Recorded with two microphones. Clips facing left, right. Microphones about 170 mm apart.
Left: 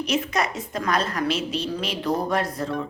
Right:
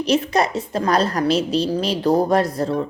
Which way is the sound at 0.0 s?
35° right (ahead or behind).